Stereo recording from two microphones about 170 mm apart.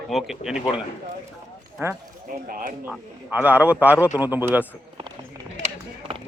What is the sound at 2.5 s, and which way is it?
Speech, 55° right (ahead or behind).